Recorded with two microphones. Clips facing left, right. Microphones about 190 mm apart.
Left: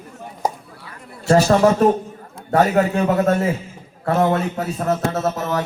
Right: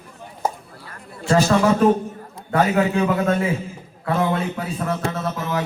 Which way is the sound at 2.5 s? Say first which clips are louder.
Left 2 dB; 45° left (ahead or behind).